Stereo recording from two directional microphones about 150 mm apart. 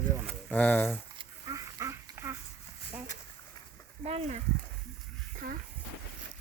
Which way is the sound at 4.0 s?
45° right (ahead or behind).